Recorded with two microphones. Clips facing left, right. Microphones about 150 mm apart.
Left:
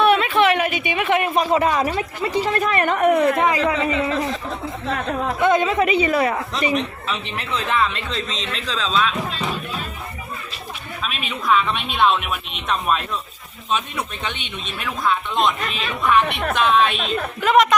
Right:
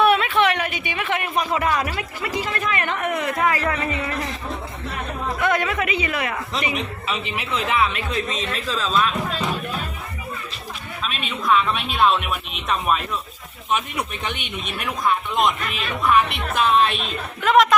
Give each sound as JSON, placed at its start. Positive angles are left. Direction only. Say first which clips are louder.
{"t": 0.0, "sound": "a sound", "louder": "left 2 dB", "side_deg": 0}
{"t": 1.4, "sound": "a woman's voice", "louder": "left 1 dB", "side_deg": 25}
{"t": 3.3, "sound": "speech", "louder": "left 3 dB", "side_deg": 20}
{"t": 5.4, "sound": "a woman's voice", "louder": "left 5 dB", "side_deg": 20}
{"t": 6.7, "sound": "a man's voice", "louder": "left 3 dB", "side_deg": -10}
{"t": 8.3, "sound": "speech", "louder": "right 2 dB", "side_deg": -50}
{"t": 8.6, "sound": "speech", "louder": "left 1 dB", "side_deg": -5}
{"t": 11.0, "sound": "speech", "louder": "even", "side_deg": 0}
{"t": 13.7, "sound": "a man's voice", "louder": "even", "side_deg": -15}
{"t": 14.4, "sound": "speech", "louder": "right 1 dB", "side_deg": -55}
{"t": 15.4, "sound": "speech", "louder": "left 1 dB", "side_deg": -5}